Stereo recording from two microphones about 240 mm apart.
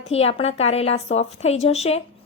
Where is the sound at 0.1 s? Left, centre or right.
Left.